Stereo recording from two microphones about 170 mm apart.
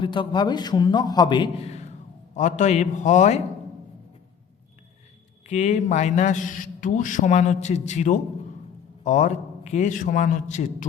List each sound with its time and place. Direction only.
0.0 s a man's voice: 30° left (ahead or behind)
2.3 s a man's voice: 45° left (ahead or behind)
5.5 s a man's voice: 40° left (ahead or behind)